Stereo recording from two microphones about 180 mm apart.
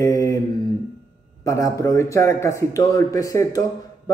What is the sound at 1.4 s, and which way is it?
A man's voice, 15° left (ahead or behind).